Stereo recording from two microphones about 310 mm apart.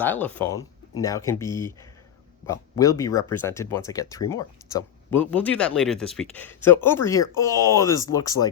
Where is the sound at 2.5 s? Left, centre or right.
Centre.